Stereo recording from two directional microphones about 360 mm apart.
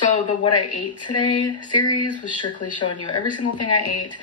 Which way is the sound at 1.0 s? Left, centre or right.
Centre.